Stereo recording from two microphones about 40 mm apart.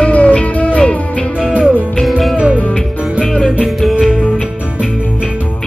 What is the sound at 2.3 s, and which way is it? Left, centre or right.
Music, right.